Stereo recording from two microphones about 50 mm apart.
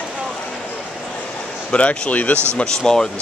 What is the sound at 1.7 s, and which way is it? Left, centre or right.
Speech, left.